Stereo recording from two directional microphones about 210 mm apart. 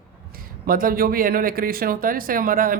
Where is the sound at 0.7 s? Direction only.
45° right (ahead or behind).